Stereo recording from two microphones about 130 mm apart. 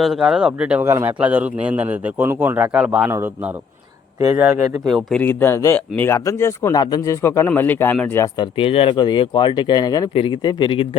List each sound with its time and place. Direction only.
0.0 s a man's voice: centre (ahead or behind)
3.1 s a man's voice: 15° right (ahead or behind)
4.2 s speech: 30° right (ahead or behind)
4.9 s speech: centre (ahead or behind)
5.2 s speech: 20° left (ahead or behind)
8.4 s speech: 45° left (ahead or behind)